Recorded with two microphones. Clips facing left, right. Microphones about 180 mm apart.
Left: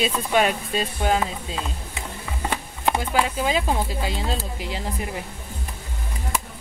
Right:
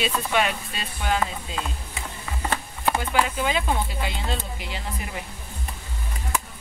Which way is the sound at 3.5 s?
35° left (ahead or behind).